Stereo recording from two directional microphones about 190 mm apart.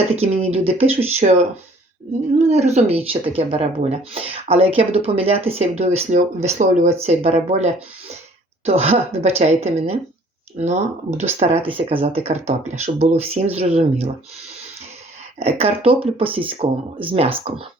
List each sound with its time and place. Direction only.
0.2 s speech: 30° right (ahead or behind)
11.3 s speech: 30° right (ahead or behind)
15.4 s speech: 35° right (ahead or behind)